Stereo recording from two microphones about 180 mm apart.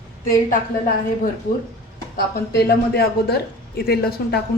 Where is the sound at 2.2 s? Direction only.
60° left (ahead or behind).